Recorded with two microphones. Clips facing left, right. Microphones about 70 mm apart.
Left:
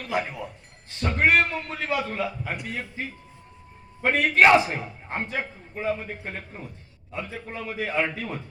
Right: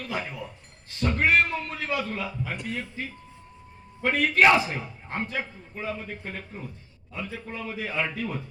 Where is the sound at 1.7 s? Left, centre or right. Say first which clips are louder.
Left 5 dB; left.